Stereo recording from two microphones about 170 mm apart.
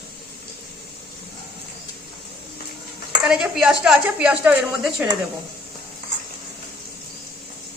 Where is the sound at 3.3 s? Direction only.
5° right (ahead or behind).